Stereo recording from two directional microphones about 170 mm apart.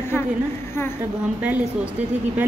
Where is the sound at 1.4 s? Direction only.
10° right (ahead or behind).